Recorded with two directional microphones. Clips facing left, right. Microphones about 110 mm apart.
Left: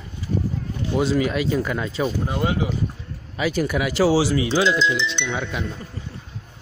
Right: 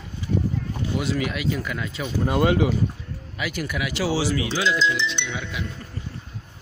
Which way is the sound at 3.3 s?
30° left (ahead or behind).